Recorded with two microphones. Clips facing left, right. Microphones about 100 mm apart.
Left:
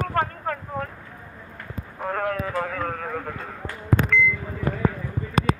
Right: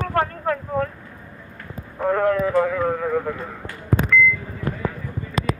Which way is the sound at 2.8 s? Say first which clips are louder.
Right 7 dB; 25° right (ahead or behind).